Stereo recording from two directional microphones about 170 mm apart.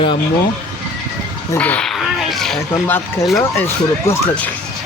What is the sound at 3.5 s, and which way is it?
Speech, 15° left (ahead or behind).